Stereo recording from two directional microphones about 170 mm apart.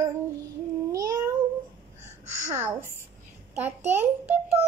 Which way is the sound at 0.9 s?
20° right (ahead or behind).